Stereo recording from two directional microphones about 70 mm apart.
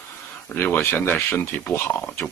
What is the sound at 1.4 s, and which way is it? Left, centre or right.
Speech, left.